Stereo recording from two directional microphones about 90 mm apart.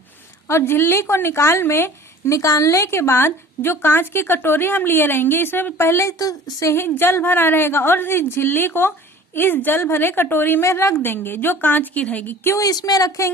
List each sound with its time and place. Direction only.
0.4 s speech: 30° left (ahead or behind)
6.7 s speech: 25° left (ahead or behind)
12.5 s speech: 40° left (ahead or behind)